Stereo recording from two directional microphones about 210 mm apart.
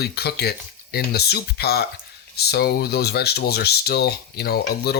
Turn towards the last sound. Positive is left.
turn(degrees=50)  # may be behind; listen again after turning